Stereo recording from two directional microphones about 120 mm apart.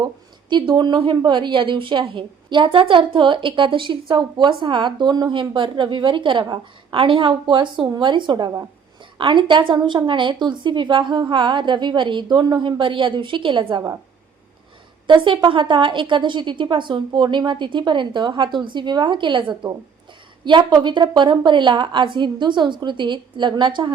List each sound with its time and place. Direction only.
0.5 s a woman's voice: 40° right (ahead or behind)
15.0 s a woman's voice: 45° right (ahead or behind)